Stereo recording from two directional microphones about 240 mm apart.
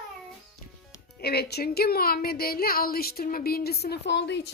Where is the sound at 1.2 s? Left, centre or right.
Left.